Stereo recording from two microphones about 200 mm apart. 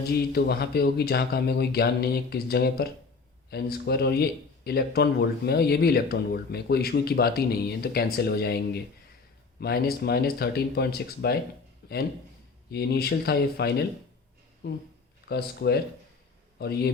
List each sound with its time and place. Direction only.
0.0 s speech: 55° left (ahead or behind)
11.8 s a sound: 55° left (ahead or behind)
12.7 s speech: 55° left (ahead or behind)